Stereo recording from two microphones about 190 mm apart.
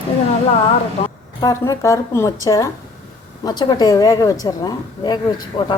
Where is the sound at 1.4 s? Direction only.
20° left (ahead or behind).